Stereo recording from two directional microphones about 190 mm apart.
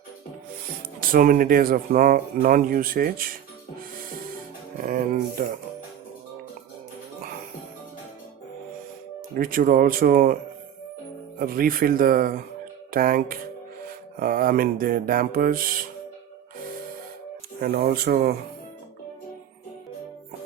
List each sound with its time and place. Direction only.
0.9 s speech: 50° right (ahead or behind)
4.8 s speech: 50° right (ahead or behind)
9.3 s speech: 50° right (ahead or behind)
11.3 s speech: 50° right (ahead or behind)
17.6 s speech: 55° right (ahead or behind)